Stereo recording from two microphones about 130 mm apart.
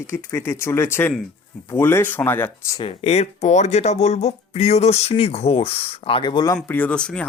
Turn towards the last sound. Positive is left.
turn(degrees=5)  # may be behind; listen again after turning